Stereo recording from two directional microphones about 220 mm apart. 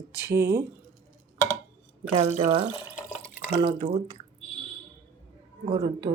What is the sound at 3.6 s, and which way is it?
Speech, 25° right (ahead or behind).